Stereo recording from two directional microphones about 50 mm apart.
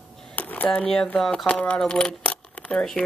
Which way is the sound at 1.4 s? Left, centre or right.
Left.